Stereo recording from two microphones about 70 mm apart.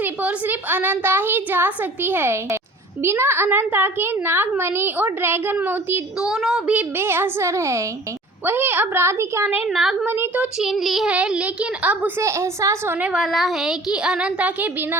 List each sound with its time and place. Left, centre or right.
0.0 s a woman's voice: right
6.1 s child singing: centre
6.9 s a child's voice: right
8.4 s a child's voice: right
9.6 s speech: centre
10.1 s a woman's voice: right
10.6 s child singing: centre
11.1 s a woman's voice: centre
12.2 s a child's voice: right
13.0 s speech: centre
13.2 s speech: centre; by 14.8 s right